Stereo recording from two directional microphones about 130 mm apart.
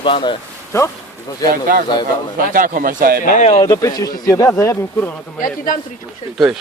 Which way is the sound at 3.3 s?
65° left (ahead or behind).